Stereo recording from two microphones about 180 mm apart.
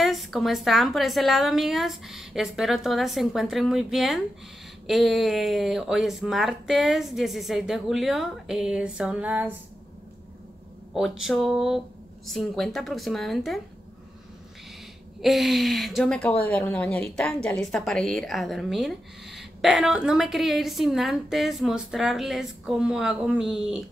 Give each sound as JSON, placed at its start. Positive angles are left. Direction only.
{"t": 0.0, "sound": "speech", "side_deg": 0}
{"t": 11.0, "sound": "speech", "side_deg": 0}
{"t": 15.2, "sound": "speech", "side_deg": 0}